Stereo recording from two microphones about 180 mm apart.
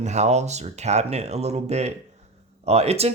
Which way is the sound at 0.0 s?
40° right (ahead or behind).